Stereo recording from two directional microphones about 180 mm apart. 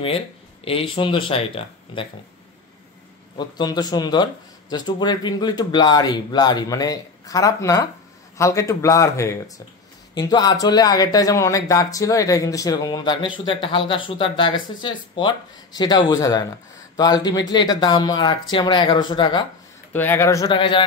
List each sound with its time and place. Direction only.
0.7 s speech: 30° left (ahead or behind)
3.3 s speech: 25° left (ahead or behind)
19.9 s speech: 10° left (ahead or behind); by 20.8 s 25° left (ahead or behind)